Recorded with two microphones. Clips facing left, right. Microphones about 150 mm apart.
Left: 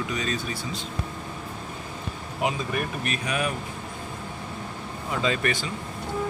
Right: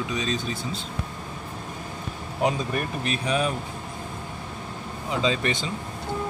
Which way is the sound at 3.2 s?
30° right (ahead or behind).